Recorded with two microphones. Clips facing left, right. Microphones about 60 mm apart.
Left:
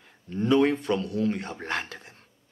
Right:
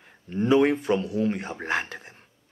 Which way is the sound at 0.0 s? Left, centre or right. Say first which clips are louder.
Right 2 dB; centre.